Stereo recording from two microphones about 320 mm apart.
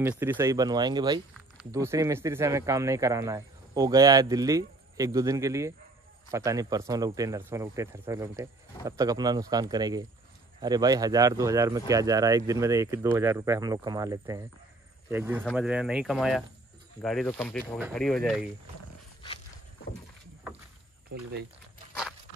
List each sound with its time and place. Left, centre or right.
0.2 s speech: centre
21.1 s speech: right